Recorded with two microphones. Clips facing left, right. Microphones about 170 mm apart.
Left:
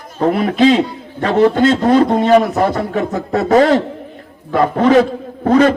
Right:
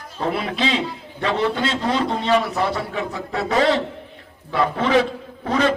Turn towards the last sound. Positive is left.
turn(degrees=45)  # may be behind; listen again after turning